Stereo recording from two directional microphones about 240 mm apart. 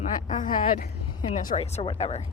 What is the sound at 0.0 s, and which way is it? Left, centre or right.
Speech, left.